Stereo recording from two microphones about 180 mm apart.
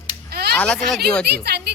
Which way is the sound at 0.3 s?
60° right (ahead or behind).